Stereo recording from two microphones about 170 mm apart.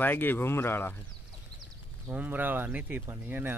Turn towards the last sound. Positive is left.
turn(degrees=-10)  # may be behind; listen again after turning